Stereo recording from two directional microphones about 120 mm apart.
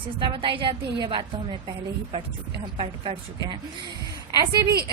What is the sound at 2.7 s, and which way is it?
Speech, 55° right (ahead or behind).